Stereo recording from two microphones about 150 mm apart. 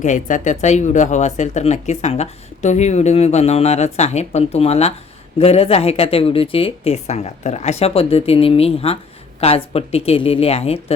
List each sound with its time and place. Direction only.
0.0 s speech: 55° left (ahead or behind)